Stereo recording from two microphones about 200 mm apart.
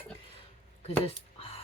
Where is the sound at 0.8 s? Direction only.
30° left (ahead or behind).